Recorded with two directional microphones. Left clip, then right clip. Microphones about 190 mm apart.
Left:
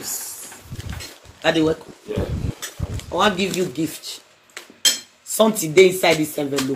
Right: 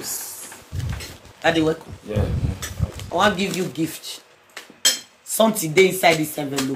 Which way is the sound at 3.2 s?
20° right (ahead or behind).